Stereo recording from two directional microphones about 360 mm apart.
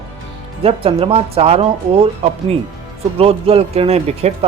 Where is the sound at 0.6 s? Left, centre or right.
Centre.